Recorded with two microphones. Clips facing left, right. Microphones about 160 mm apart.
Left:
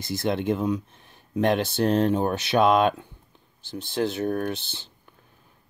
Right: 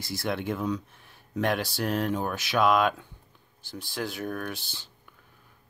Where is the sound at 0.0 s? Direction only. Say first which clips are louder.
Left 5 dB; 20° left (ahead or behind).